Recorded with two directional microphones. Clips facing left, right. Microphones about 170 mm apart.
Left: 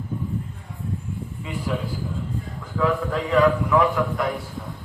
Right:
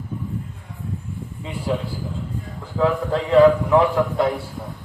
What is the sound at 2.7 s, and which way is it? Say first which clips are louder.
A man's voice: right 3 dB; 30° right (ahead or behind).